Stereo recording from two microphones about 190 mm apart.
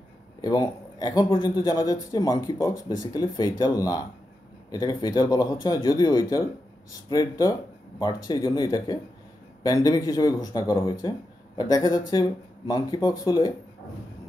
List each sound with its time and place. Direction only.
0.4 s speech: 20° left (ahead or behind)